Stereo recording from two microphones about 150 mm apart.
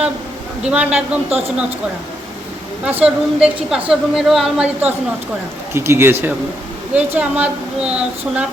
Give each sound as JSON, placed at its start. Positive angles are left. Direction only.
{"t": 0.6, "sound": "a woman's voice", "side_deg": -5}
{"t": 1.3, "sound": "speech", "side_deg": -45}
{"t": 2.8, "sound": "a woman's voice", "side_deg": -10}